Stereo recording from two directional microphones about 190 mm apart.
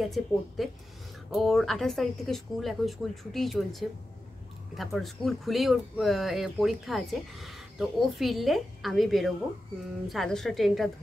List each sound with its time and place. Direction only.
0.0 s speech: centre (ahead or behind)
4.7 s speech: centre (ahead or behind)